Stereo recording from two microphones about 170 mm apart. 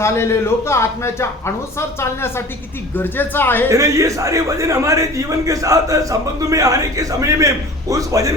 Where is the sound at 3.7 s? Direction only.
20° right (ahead or behind).